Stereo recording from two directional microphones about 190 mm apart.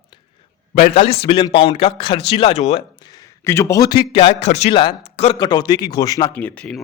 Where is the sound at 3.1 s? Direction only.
15° left (ahead or behind).